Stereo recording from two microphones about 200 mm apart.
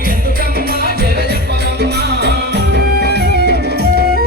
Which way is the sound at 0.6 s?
50° right (ahead or behind).